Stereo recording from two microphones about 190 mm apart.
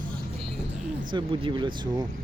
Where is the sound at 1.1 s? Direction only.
25° right (ahead or behind).